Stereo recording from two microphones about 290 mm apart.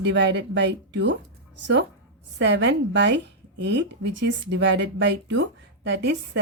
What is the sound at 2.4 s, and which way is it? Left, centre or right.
Speech, right.